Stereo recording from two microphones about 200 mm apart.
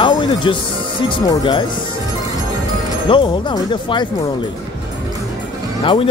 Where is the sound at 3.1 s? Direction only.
25° left (ahead or behind).